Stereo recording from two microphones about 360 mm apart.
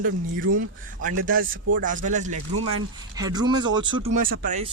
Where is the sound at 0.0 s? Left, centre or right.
Right.